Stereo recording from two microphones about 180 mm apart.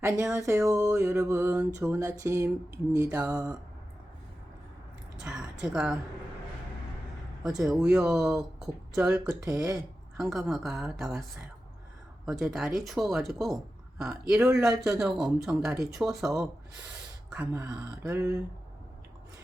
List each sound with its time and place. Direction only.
0.0 s a sound: 15° right (ahead or behind)
3.3 s speech: 20° right (ahead or behind)
5.1 s a woman's voice: 5° right (ahead or behind)
7.7 s speech: 5° right (ahead or behind)
9.1 s speech: 20° right (ahead or behind)
10.2 s speech: centre (ahead or behind)
12.2 s speech: 5° right (ahead or behind)
17.2 s a sound: 5° right (ahead or behind)